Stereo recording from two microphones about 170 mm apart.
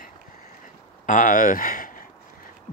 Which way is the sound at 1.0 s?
50° left (ahead or behind).